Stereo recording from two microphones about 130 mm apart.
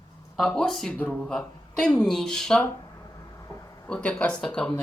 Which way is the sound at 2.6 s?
25° left (ahead or behind).